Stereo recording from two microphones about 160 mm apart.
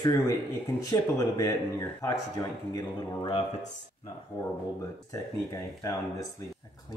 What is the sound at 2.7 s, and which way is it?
Speech, 30° left (ahead or behind).